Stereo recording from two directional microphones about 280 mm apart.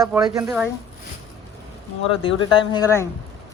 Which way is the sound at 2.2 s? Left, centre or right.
Centre.